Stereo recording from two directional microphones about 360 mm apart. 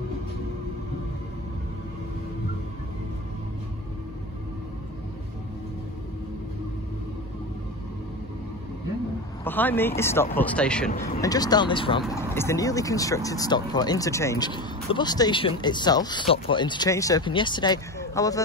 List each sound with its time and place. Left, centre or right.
9.4 s speech: centre
10.9 s speech: left
11.1 s speech: centre